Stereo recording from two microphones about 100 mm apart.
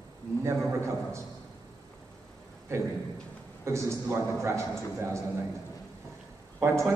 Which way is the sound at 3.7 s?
30° right (ahead or behind).